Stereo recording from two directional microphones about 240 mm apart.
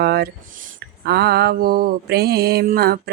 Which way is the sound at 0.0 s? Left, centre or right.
Right.